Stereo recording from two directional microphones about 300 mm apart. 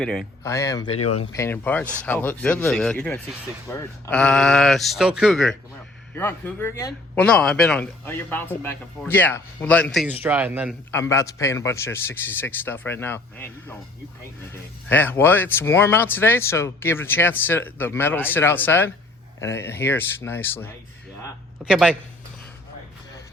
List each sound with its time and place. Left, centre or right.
0.0 s speech: centre
1.0 s speech: left
1.3 s speech: centre
10.9 s speech: centre
14.8 s speech: centre